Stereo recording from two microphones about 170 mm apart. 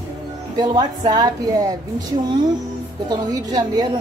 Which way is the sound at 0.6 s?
25° right (ahead or behind).